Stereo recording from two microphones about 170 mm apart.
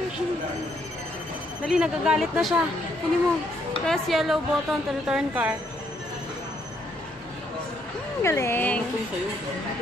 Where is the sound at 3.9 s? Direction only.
Centre (ahead or behind).